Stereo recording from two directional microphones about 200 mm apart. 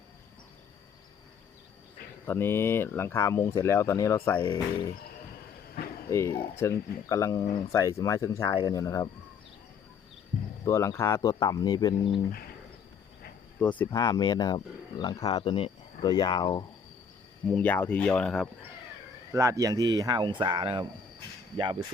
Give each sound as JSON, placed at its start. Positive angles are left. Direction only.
{"t": 2.2, "sound": "speech", "side_deg": 10}
{"t": 6.1, "sound": "speech", "side_deg": 15}
{"t": 10.7, "sound": "speech", "side_deg": 15}
{"t": 13.6, "sound": "speech", "side_deg": 5}
{"t": 13.9, "sound": "speech", "side_deg": 20}
{"t": 17.5, "sound": "speech", "side_deg": 5}
{"t": 19.3, "sound": "speech", "side_deg": -15}